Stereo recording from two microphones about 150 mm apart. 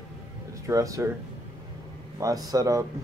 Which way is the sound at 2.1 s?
25° right (ahead or behind).